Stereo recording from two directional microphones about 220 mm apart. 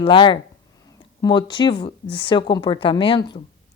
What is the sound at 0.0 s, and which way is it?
Speech, 20° left (ahead or behind).